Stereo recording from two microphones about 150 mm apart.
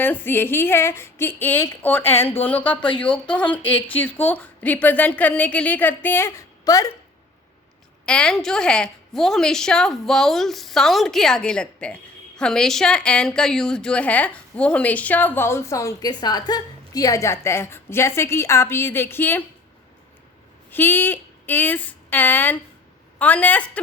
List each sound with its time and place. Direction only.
0.0 s a woman's voice: 15° left (ahead or behind)
8.0 s a woman's voice: 5° left (ahead or behind)
20.7 s a woman's voice: 15° left (ahead or behind)